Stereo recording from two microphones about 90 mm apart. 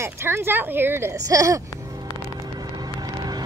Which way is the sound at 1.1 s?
40° right (ahead or behind).